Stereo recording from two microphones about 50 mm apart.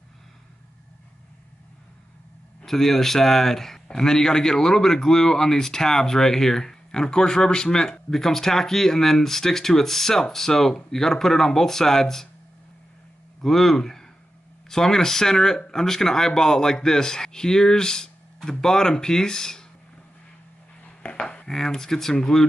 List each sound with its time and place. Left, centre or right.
2.6 s speech: centre
13.4 s speech: centre
20.8 s a sound: left
21.5 s speech: centre